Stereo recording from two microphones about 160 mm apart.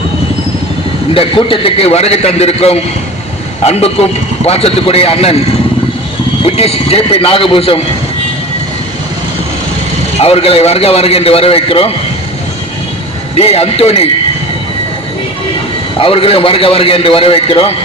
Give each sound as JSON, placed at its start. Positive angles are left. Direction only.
{"t": 1.1, "sound": "a man's voice", "side_deg": 35}
{"t": 6.4, "sound": "a man's voice", "side_deg": 40}
{"t": 10.2, "sound": "a man's voice", "side_deg": 40}
{"t": 13.4, "sound": "a man's voice", "side_deg": 40}
{"t": 16.0, "sound": "a man's voice", "side_deg": 35}